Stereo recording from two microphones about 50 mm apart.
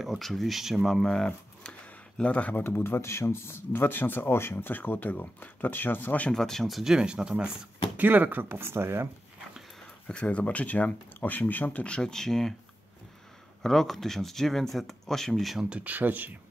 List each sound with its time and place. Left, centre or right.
0.2 s speech: centre
1.0 s speech: centre; by 2.6 s left
2.6 s speech: left
6.3 s speech: centre
6.8 s speech: centre
8.0 s speech: right
8.5 s speech: right
10.0 s speech: left
11.9 s speech: centre
13.6 s speech: centre
15.7 s speech: right